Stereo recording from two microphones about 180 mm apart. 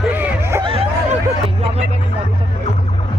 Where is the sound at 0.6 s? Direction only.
30° right (ahead or behind).